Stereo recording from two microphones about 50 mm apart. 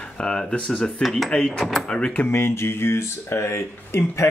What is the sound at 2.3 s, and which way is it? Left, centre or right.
Speech, left.